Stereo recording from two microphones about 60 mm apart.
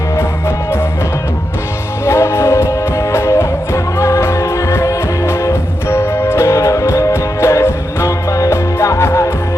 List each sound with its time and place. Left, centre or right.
2.0 s music: left
5.9 s music: left